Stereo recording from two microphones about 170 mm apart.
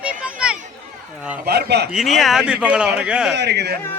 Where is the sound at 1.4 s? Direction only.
75° right (ahead or behind).